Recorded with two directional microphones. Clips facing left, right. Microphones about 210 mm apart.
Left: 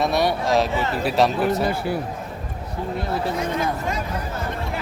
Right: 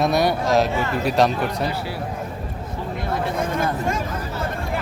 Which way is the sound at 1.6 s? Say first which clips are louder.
Left 3 dB; 50° left (ahead or behind).